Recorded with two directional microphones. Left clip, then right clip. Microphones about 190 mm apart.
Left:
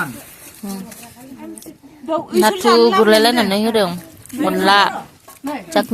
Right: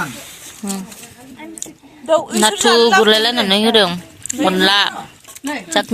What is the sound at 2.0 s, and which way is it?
Speech, 40° right (ahead or behind).